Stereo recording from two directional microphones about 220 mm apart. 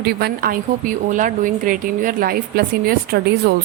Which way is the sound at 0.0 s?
45° right (ahead or behind).